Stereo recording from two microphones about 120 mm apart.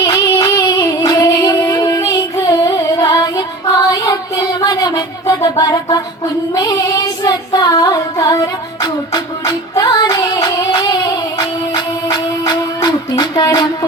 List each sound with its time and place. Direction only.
0.0 s a sound: 40° left (ahead or behind)
0.3 s music: 35° left (ahead or behind)
6.5 s child singing: 35° left (ahead or behind)
10.8 s music: 35° left (ahead or behind)